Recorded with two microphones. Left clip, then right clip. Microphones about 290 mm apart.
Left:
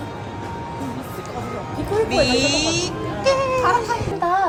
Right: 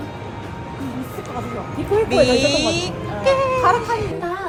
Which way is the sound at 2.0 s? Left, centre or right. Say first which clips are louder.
Right 3 dB; centre.